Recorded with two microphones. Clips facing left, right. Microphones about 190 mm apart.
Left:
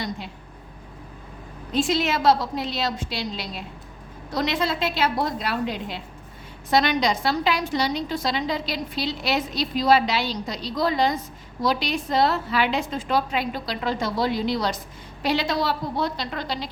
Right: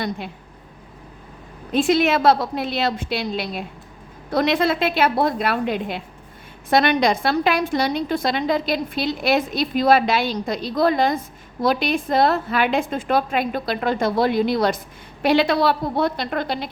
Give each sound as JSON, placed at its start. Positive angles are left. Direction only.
{"t": 1.7, "sound": "a woman's voice", "side_deg": -55}